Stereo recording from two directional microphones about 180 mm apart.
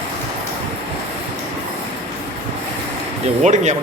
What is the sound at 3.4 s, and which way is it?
Speech, 40° right (ahead or behind).